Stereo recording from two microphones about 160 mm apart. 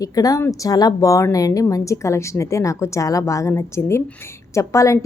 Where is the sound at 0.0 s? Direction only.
20° left (ahead or behind).